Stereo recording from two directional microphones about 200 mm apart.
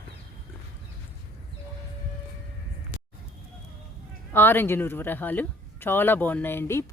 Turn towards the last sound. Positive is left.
turn(degrees=10)  # may be behind; listen again after turning